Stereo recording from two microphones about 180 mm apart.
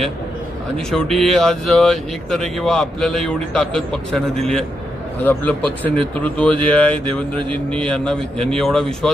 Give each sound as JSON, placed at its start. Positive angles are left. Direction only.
{"t": 0.8, "sound": "speech", "side_deg": 5}
{"t": 7.0, "sound": "a sound", "side_deg": -30}
{"t": 7.5, "sound": "speech", "side_deg": 5}